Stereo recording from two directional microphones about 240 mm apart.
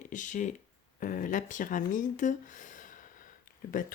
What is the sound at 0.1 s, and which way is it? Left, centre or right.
Speech, left.